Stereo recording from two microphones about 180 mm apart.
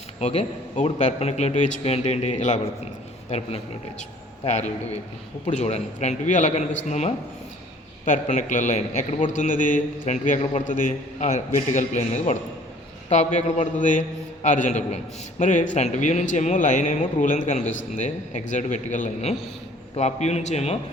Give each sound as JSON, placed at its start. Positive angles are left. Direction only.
{"t": 0.2, "sound": "a man's voice", "side_deg": 35}